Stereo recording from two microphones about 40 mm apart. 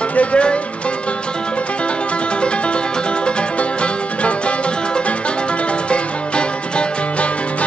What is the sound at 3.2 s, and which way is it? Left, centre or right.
Music, left.